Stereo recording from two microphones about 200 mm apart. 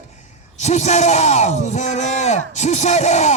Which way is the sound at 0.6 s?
35° left (ahead or behind).